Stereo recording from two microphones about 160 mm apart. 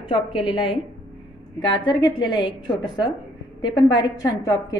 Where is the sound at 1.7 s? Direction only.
30° left (ahead or behind).